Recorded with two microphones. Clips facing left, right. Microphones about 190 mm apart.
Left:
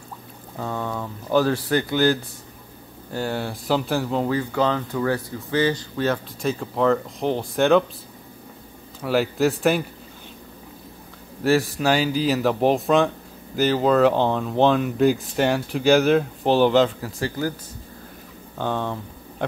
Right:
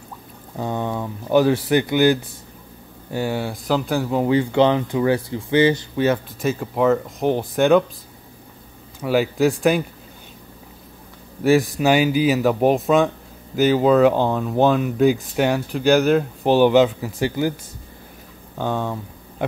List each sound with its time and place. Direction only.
0.6 s speech: 20° right (ahead or behind)
4.3 s speech: 20° right (ahead or behind)
6.0 s speech: 5° right (ahead or behind)
9.0 s speech: centre (ahead or behind)
11.8 s speech: 10° right (ahead or behind)
18.6 s speech: 10° right (ahead or behind)